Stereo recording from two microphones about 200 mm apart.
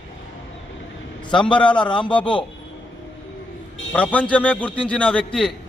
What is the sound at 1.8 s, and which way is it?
Speech, 25° left (ahead or behind).